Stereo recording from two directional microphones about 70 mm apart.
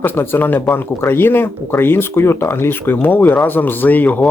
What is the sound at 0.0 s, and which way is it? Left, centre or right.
Speech, left.